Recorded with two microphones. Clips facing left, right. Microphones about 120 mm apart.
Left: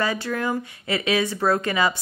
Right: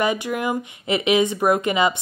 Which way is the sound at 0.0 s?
15° right (ahead or behind).